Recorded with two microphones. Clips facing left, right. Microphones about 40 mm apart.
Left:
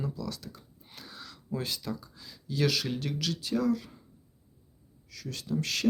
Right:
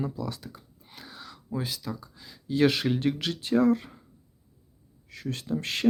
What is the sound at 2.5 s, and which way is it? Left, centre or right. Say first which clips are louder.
Speech: right 6 dB; right.